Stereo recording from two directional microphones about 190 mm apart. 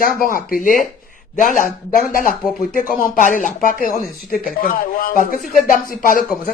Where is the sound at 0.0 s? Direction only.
50° left (ahead or behind).